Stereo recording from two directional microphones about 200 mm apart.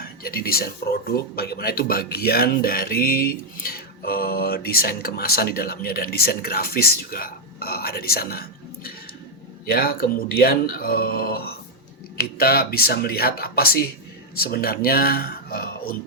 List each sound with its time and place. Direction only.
0.0 s speech: 50° left (ahead or behind)